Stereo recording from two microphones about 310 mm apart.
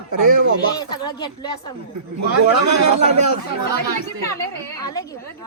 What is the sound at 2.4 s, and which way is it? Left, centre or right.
Speech, right.